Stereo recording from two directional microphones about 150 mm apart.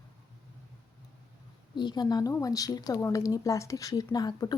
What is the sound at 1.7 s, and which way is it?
Speech, 30° left (ahead or behind).